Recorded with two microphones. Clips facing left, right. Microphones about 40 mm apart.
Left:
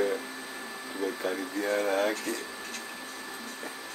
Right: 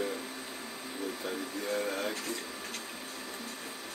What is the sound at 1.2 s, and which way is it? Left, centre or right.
Speech, left.